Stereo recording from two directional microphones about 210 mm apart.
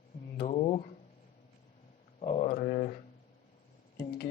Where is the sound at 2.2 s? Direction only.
30° left (ahead or behind).